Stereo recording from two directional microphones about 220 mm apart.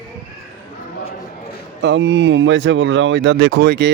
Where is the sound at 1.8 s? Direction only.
55° right (ahead or behind).